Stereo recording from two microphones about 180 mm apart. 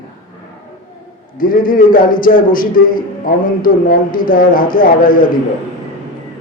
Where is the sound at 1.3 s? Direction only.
50° left (ahead or behind).